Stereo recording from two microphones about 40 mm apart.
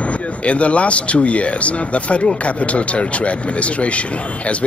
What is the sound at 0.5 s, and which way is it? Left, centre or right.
Speech, left.